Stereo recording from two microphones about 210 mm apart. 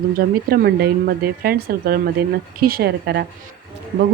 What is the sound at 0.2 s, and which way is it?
A woman's voice, 50° right (ahead or behind).